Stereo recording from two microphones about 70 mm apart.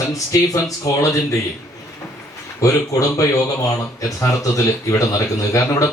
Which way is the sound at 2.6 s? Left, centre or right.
Left.